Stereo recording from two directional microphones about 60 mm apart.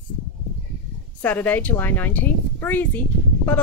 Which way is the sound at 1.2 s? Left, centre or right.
Left.